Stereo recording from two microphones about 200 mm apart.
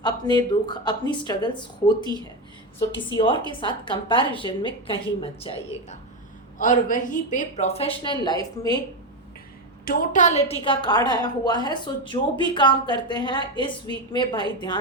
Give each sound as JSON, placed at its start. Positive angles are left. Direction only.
{"t": 0.0, "sound": "speech", "side_deg": 20}
{"t": 3.1, "sound": "speech", "side_deg": 25}
{"t": 6.6, "sound": "a woman's voice", "side_deg": 40}
{"t": 9.8, "sound": "a woman's voice", "side_deg": 45}